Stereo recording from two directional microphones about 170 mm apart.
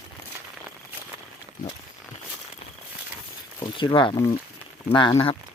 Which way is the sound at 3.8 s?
30° left (ahead or behind).